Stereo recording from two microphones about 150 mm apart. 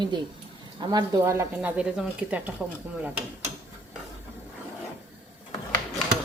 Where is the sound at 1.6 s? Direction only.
10° right (ahead or behind).